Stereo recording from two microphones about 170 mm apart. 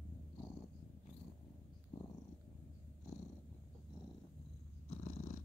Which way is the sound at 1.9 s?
25° left (ahead or behind).